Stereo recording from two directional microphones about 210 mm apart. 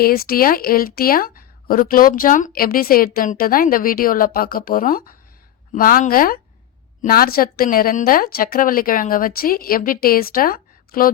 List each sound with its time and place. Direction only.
0.0 s a woman's voice: 45° left (ahead or behind)